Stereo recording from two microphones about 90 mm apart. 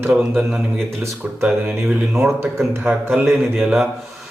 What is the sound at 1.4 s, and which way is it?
A man's voice, 25° right (ahead or behind).